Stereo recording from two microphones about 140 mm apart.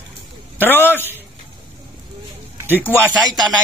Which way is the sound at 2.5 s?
15° right (ahead or behind).